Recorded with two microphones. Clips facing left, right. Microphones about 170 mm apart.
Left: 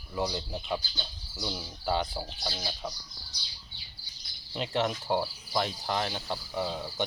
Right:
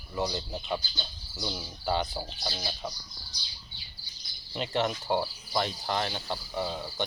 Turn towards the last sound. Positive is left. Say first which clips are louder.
# even
turn(degrees=0)  # may be behind; listen again after turning